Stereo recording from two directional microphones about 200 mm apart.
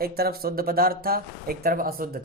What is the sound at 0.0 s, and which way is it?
Speech, 50° right (ahead or behind).